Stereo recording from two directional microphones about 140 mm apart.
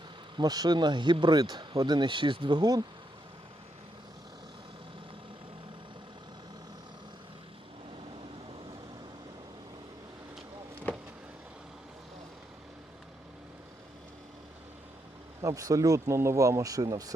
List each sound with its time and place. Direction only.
0.3 s speech: 30° right (ahead or behind)
15.4 s speech: 25° right (ahead or behind)